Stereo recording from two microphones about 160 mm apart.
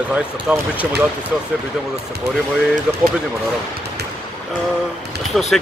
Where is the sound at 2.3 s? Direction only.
90° right.